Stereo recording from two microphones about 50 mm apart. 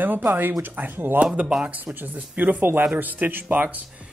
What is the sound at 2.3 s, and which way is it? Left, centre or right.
Speech, right.